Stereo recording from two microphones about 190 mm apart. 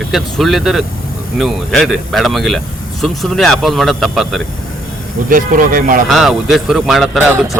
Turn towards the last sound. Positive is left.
turn(degrees=-10)  # may be behind; listen again after turning